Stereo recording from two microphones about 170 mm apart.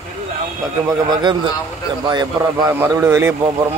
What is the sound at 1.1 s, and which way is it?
A man's voice, 25° right (ahead or behind).